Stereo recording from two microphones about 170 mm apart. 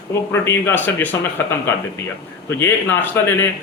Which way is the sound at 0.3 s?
10° left (ahead or behind).